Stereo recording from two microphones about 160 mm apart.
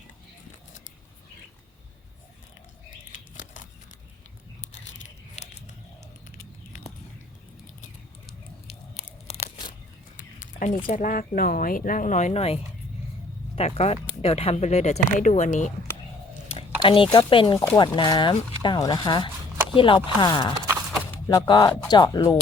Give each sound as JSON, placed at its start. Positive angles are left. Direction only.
{"t": 3.3, "sound": "scissors", "side_deg": 50}
{"t": 4.6, "sound": "a sound", "side_deg": 50}
{"t": 8.6, "sound": "tearing", "side_deg": 40}
{"t": 10.2, "sound": "a sound", "side_deg": 55}
{"t": 10.8, "sound": "speech", "side_deg": 55}
{"t": 13.6, "sound": "speech", "side_deg": 40}
{"t": 16.6, "sound": "speech", "side_deg": 35}